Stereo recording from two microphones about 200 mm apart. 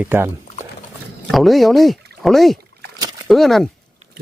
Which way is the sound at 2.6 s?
55° right (ahead or behind).